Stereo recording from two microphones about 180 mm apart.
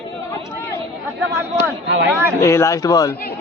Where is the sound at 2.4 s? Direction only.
15° left (ahead or behind).